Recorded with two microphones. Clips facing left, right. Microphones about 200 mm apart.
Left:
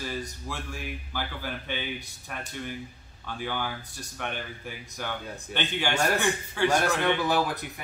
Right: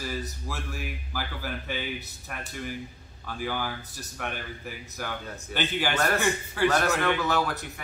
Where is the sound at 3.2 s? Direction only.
5° right (ahead or behind).